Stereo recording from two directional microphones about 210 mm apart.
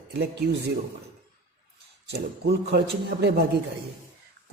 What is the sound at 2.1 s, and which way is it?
Speech, 50° right (ahead or behind).